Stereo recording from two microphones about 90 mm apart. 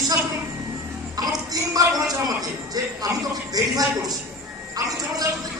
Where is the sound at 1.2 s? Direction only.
45° right (ahead or behind).